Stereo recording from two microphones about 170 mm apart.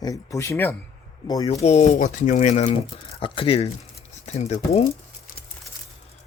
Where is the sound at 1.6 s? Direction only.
40° left (ahead or behind).